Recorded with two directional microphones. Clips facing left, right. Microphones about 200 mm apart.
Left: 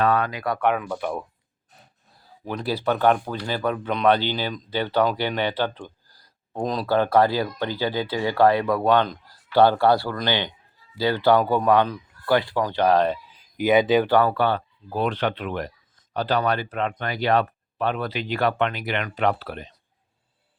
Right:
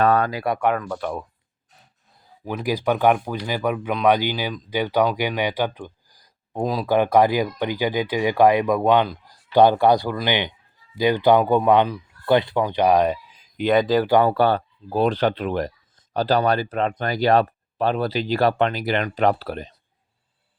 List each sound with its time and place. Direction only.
0.0 s speech: 40° right (ahead or behind)
0.8 s speech: 10° left (ahead or behind)
2.4 s speech: 10° right (ahead or behind)
13.6 s speech: 5° left (ahead or behind)
14.1 s speech: 20° right (ahead or behind)
14.3 s speech: 40° right (ahead or behind)